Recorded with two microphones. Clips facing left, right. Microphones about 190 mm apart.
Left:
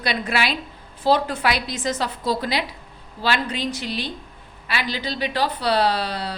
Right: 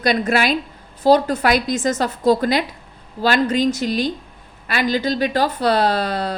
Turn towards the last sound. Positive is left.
turn(degrees=-45)  # may be behind; listen again after turning